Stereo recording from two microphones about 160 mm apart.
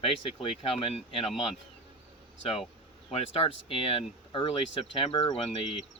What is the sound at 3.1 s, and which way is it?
Speech, 40° left (ahead or behind).